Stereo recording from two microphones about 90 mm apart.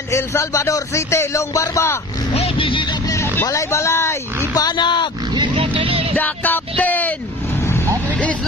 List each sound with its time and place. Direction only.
0.1 s speech: 30° left (ahead or behind)
2.4 s a sound: 75° left (ahead or behind)
3.1 s vehicle: 30° left (ahead or behind)
3.4 s speech: 35° left (ahead or behind)
4.6 s speech: 55° left (ahead or behind)
5.6 s music: 90° right
6.1 s music: 20° left (ahead or behind)
6.8 s vehicle: 20° left (ahead or behind)